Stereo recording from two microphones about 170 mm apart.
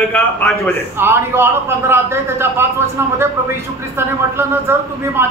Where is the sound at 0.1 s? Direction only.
10° left (ahead or behind).